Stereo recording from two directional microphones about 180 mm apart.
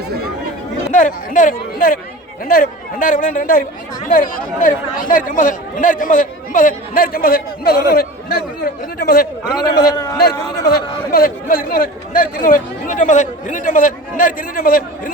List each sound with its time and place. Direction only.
0.9 s speech: 45° left (ahead or behind)
9.5 s a man's voice: 20° left (ahead or behind)
11.1 s speech: 55° left (ahead or behind)